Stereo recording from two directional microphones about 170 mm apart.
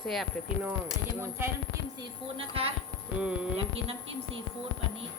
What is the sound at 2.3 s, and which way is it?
Speech, 35° right (ahead or behind).